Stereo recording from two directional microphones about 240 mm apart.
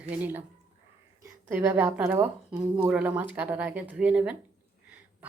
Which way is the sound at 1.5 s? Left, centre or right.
Centre.